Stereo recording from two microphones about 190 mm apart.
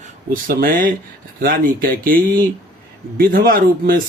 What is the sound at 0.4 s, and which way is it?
A man's voice, 50° right (ahead or behind).